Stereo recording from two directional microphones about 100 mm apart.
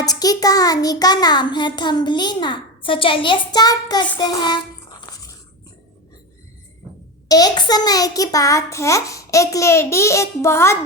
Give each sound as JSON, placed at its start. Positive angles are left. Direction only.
{"t": 0.0, "sound": "child singing", "side_deg": 40}
{"t": 4.2, "sound": "a sound", "side_deg": 45}
{"t": 7.3, "sound": "a child's voice", "side_deg": 40}